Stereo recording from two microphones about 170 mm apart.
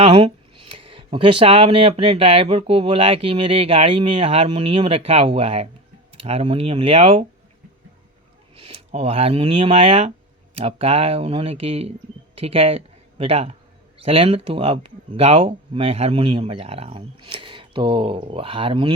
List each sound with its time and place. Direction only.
0.0 s speech: 30° right (ahead or behind)
8.5 s speech: 35° right (ahead or behind)